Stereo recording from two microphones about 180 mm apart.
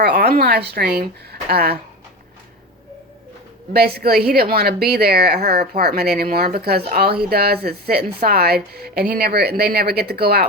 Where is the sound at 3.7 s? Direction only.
60° right (ahead or behind).